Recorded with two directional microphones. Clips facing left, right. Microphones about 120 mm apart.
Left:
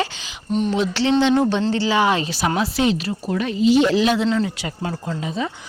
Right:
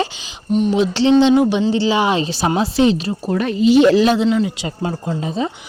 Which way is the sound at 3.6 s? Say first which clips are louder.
Right 5 dB; 65° right (ahead or behind).